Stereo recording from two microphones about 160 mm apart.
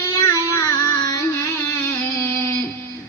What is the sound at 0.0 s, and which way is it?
Music, 20° left (ahead or behind).